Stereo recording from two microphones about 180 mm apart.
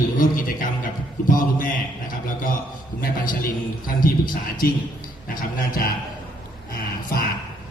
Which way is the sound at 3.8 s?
50° left (ahead or behind).